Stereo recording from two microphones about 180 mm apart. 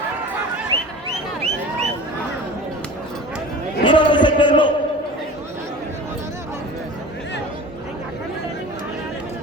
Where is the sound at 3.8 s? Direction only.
25° left (ahead or behind).